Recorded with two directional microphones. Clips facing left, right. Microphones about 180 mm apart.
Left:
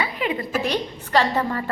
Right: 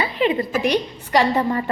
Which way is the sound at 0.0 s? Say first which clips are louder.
Right 5 dB; 30° right (ahead or behind).